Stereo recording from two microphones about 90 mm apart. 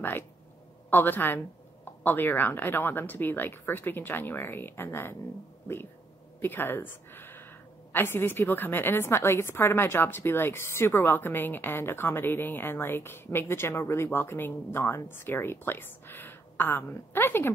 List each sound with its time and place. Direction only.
0.8 s a woman's voice: 20° left (ahead or behind)
6.4 s a woman's voice: 25° left (ahead or behind)